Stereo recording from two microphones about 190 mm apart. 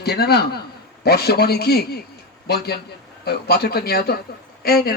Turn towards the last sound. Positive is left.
turn(degrees=55)  # may be behind; listen again after turning